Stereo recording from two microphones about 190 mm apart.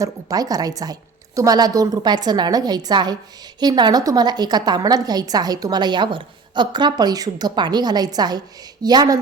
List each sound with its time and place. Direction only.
0.0 s a woman's voice: 20° right (ahead or behind)